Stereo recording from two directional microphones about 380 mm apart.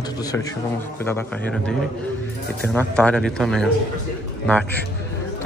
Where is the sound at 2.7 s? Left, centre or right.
Centre.